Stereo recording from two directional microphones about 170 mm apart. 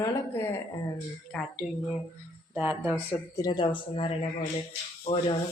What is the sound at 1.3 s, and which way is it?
Speech, 5° left (ahead or behind).